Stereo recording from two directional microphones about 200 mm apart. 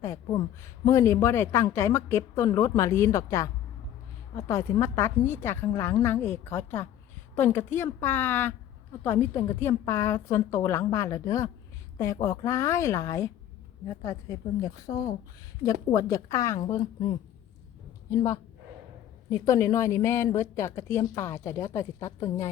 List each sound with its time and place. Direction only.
0.0 s speech: 15° left (ahead or behind)
19.3 s speech: 15° left (ahead or behind)